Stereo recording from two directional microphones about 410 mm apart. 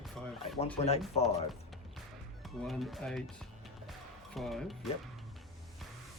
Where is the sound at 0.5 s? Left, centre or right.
Centre.